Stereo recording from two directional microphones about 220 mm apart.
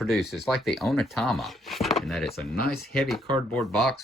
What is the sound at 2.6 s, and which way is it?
Speech, 45° left (ahead or behind).